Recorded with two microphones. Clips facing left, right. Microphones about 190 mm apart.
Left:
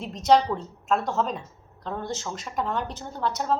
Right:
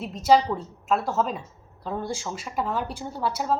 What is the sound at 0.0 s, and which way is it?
A woman's voice, 5° right (ahead or behind).